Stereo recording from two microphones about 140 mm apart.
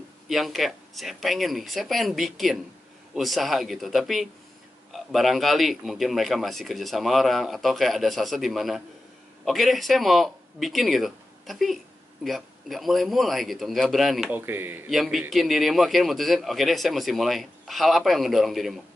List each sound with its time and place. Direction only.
0.3 s speech: centre (ahead or behind)
14.3 s speech: 15° right (ahead or behind)
14.9 s speech: centre (ahead or behind)